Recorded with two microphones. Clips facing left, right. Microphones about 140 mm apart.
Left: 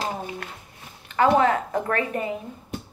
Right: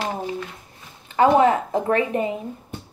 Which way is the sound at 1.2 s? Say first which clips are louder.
Right 3 dB; 25° right (ahead or behind).